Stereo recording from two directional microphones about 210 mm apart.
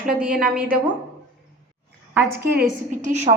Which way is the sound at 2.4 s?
45° right (ahead or behind).